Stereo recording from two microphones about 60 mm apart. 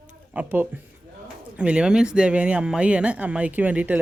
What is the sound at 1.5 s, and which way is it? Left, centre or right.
Speech, centre.